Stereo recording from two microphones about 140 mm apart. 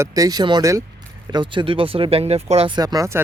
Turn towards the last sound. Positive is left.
turn(degrees=-20)  # may be behind; listen again after turning